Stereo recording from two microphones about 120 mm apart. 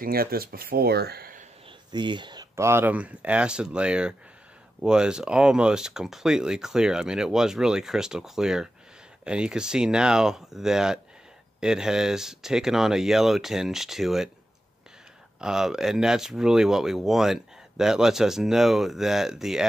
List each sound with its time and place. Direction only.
1.9 s speech: 40° right (ahead or behind)
2.5 s speech: 20° right (ahead or behind); by 14.3 s centre (ahead or behind)
15.4 s speech: 5° right (ahead or behind)